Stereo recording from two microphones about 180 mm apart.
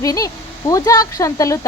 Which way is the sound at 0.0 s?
20° left (ahead or behind).